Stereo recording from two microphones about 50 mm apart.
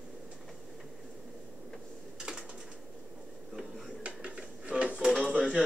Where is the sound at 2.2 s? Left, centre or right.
Centre.